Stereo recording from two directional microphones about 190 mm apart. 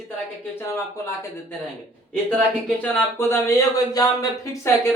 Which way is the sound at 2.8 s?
10° left (ahead or behind).